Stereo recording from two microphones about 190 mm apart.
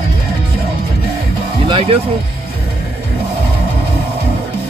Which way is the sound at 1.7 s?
30° right (ahead or behind).